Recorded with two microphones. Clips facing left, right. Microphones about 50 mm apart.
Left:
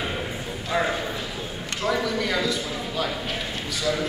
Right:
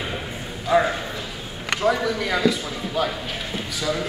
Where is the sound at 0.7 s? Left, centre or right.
Centre.